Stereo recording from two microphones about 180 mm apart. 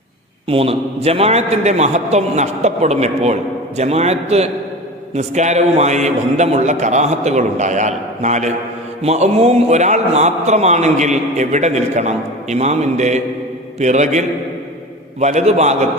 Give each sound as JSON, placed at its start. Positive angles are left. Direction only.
{"t": 0.4, "sound": "a man's voice", "side_deg": -30}